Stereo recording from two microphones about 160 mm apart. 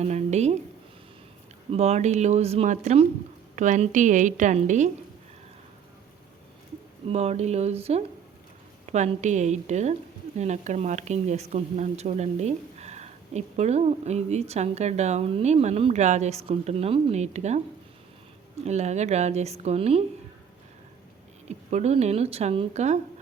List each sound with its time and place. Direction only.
0.0 s speech: 45° right (ahead or behind)
1.7 s speech: 40° right (ahead or behind)
7.1 s speech: 40° right (ahead or behind)
18.6 s speech: 45° right (ahead or behind)
21.7 s speech: 45° right (ahead or behind)